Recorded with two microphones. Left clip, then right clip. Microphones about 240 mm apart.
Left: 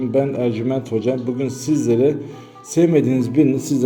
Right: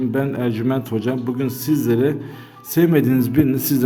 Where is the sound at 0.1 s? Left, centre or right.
Right.